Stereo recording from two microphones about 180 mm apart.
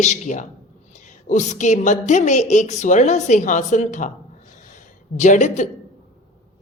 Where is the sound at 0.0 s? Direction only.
40° left (ahead or behind).